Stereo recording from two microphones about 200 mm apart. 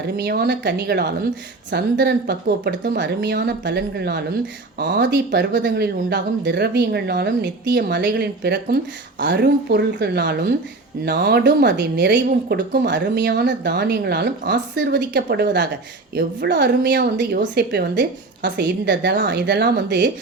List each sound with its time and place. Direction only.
0.2 s speech: 55° right (ahead or behind)